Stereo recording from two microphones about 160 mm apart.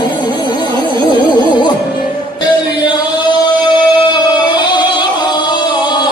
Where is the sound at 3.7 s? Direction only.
30° left (ahead or behind).